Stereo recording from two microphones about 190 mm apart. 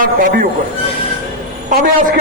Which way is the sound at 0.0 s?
45° right (ahead or behind).